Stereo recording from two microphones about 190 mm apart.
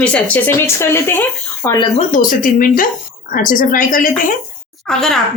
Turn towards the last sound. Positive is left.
turn(degrees=0)  # may be behind; listen again after turning